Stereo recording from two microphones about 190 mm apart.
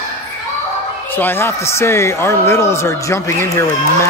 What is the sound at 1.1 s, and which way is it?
Speech, 10° left (ahead or behind).